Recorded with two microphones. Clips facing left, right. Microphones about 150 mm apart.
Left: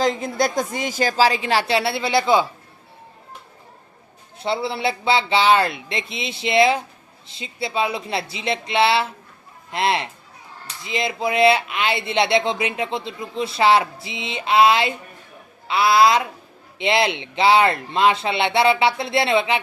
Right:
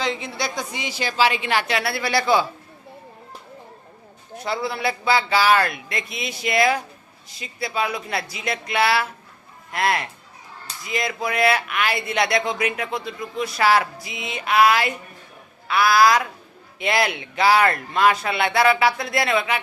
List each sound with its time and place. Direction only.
0.0 s a woman's voice: 45° left (ahead or behind); by 2.5 s 20° left (ahead or behind)
4.4 s speech: 25° left (ahead or behind)